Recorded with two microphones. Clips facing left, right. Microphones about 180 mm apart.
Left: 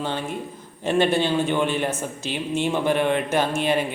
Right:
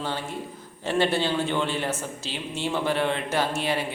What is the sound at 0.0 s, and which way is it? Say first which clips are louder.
A man's voice: left 3 dB; 20° left (ahead or behind).